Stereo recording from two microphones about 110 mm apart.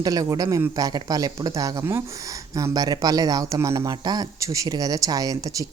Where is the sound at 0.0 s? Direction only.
35° right (ahead or behind).